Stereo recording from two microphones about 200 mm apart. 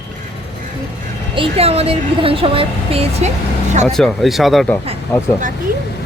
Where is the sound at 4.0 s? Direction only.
Centre (ahead or behind).